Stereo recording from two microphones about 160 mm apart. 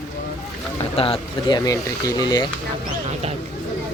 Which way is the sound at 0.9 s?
35° left (ahead or behind).